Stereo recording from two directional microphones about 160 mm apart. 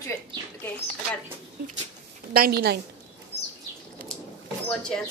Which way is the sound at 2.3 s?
75° right (ahead or behind).